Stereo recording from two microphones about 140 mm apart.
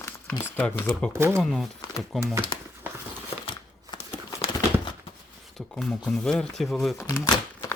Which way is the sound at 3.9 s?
30° left (ahead or behind).